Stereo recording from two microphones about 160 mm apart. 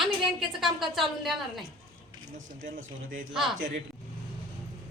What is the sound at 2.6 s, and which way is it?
Speech, 60° right (ahead or behind).